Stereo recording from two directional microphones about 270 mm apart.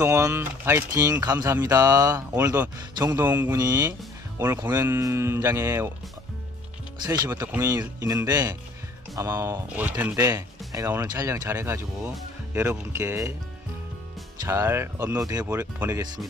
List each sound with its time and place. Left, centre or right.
0.0 s speech: centre
7.1 s speech: centre
14.4 s speech: centre